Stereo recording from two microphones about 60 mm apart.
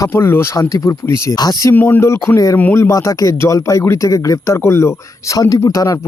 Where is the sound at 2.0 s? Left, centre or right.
Left.